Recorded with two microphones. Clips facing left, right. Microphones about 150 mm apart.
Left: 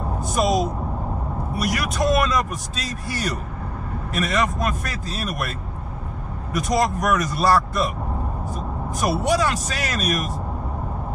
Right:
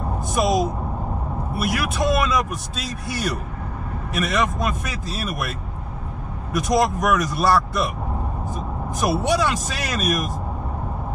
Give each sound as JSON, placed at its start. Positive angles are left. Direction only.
{"t": 0.3, "sound": "a sound", "side_deg": 0}
{"t": 1.5, "sound": "speech", "side_deg": -5}
{"t": 6.5, "sound": "speech", "side_deg": 0}
{"t": 9.0, "sound": "speech", "side_deg": 0}